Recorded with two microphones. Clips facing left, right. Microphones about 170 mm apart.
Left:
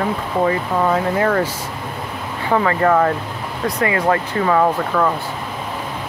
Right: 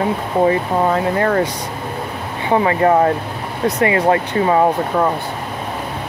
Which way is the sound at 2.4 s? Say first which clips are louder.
Right 2 dB; 20° right (ahead or behind).